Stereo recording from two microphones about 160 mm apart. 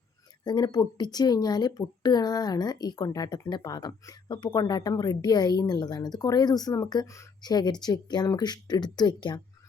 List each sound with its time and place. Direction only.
0.4 s a woman's voice: 25° left (ahead or behind)